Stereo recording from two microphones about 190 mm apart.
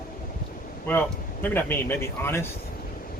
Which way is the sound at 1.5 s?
10° left (ahead or behind).